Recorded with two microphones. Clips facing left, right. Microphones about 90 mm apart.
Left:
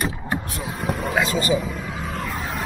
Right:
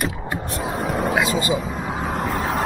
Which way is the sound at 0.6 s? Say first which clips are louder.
Right 4 dB; 35° right (ahead or behind).